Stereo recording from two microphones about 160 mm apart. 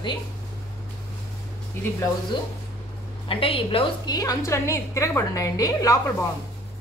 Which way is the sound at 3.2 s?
35° left (ahead or behind).